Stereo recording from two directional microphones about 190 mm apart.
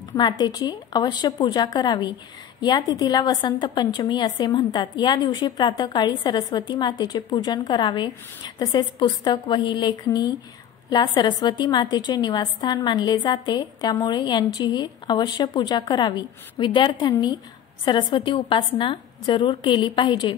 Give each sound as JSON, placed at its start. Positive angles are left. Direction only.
{"t": 0.1, "sound": "a woman's voice", "side_deg": 20}